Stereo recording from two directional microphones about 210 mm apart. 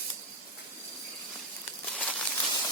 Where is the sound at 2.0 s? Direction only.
5° left (ahead or behind).